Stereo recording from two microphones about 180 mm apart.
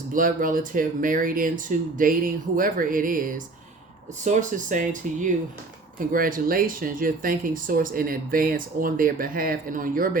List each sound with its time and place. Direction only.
0.1 s speech: 50° right (ahead or behind)